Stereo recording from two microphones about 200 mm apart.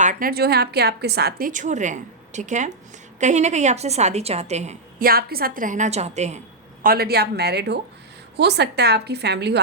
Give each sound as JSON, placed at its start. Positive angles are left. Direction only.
{"t": 0.0, "sound": "a woman's voice", "side_deg": -40}
{"t": 5.0, "sound": "a woman's voice", "side_deg": -50}
{"t": 6.8, "sound": "a woman's voice", "side_deg": -50}